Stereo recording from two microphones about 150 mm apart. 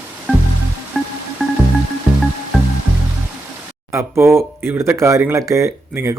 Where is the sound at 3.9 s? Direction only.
15° right (ahead or behind).